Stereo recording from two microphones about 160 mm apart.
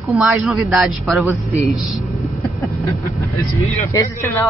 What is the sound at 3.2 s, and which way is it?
Speech, 15° left (ahead or behind).